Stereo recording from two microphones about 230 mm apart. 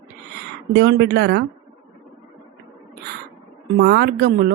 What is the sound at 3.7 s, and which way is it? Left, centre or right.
Speech, right.